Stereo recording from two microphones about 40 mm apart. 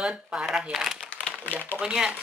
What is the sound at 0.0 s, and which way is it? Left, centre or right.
Speech, right.